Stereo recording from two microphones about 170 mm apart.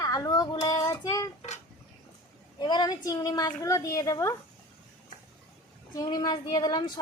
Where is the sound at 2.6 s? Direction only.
25° left (ahead or behind).